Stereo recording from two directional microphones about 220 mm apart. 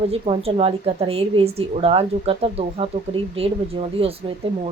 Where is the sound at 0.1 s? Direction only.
25° right (ahead or behind).